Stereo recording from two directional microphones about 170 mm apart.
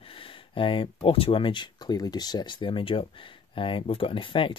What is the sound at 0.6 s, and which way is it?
Speech, 30° left (ahead or behind).